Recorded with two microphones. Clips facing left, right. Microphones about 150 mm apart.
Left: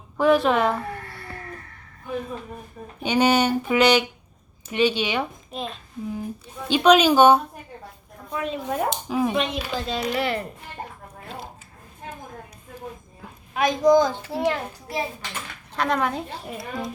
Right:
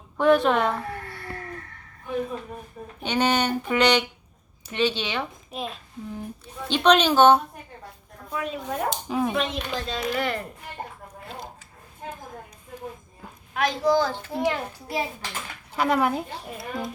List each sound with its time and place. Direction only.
0.2 s a woman's voice: centre (ahead or behind)
3.0 s speech: 10° left (ahead or behind)
5.5 s a child's voice: centre (ahead or behind)
9.9 s speech: 15° left (ahead or behind)
10.2 s a woman's voice: 5° left (ahead or behind)
13.5 s speech: 15° left (ahead or behind)
14.4 s a woman's voice: 5° right (ahead or behind)